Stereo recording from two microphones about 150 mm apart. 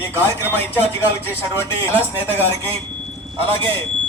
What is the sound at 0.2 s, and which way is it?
A man's voice, 15° left (ahead or behind).